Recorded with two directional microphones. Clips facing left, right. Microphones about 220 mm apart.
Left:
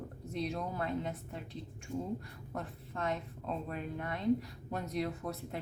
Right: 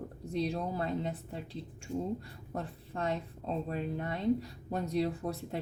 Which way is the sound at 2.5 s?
30° right (ahead or behind).